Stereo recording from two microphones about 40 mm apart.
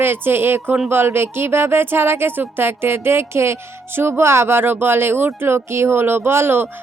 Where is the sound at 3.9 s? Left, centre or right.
Right.